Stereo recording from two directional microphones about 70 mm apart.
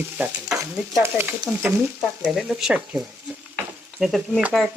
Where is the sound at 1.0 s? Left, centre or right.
Right.